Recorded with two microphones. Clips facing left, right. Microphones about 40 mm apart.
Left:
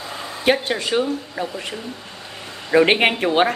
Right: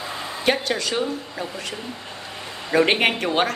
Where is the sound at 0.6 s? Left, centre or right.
Left.